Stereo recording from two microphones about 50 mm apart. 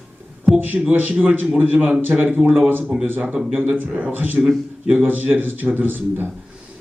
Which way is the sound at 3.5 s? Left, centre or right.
Right.